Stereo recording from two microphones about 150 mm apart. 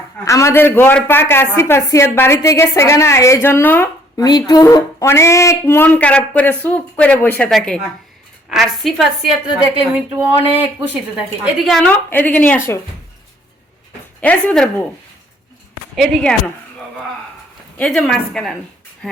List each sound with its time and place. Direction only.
0.3 s speech: 20° left (ahead or behind)
4.2 s a woman's voice: 25° left (ahead or behind); by 10.6 s 10° right (ahead or behind)
11.6 s a woman's voice: 5° left (ahead or behind)
14.2 s speech: 10° left (ahead or behind)
17.7 s a woman's voice: 5° left (ahead or behind)